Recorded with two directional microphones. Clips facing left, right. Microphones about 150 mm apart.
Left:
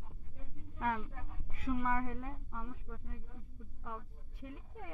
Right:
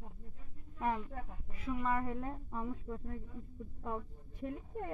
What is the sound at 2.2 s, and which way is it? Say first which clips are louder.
Speech: right 5 dB; 35° right (ahead or behind).